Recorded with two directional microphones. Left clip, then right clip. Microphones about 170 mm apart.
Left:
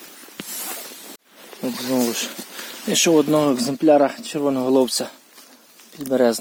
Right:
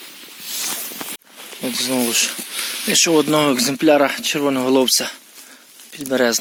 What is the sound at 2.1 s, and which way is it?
Speech, 15° left (ahead or behind).